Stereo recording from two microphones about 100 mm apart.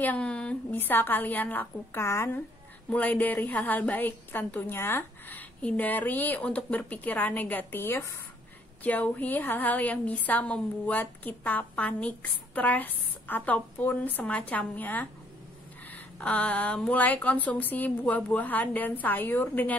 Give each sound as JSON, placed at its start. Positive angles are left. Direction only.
{"t": 0.0, "sound": "a woman's voice", "side_deg": 15}
{"t": 0.7, "sound": "a woman's voice", "side_deg": 20}